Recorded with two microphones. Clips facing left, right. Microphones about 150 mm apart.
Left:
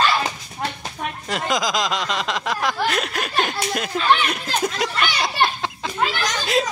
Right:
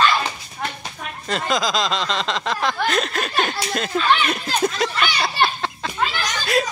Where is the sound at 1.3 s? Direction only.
15° left (ahead or behind).